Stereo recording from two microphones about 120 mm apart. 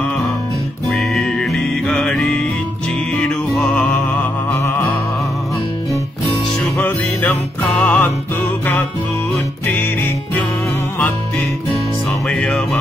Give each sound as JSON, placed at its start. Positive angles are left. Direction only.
{"t": 0.8, "sound": "music", "side_deg": 0}
{"t": 6.6, "sound": "music", "side_deg": 15}
{"t": 9.7, "sound": "music", "side_deg": 15}
{"t": 12.3, "sound": "music", "side_deg": 5}